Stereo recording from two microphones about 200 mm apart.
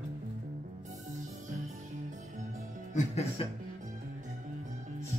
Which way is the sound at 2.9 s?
30° left (ahead or behind).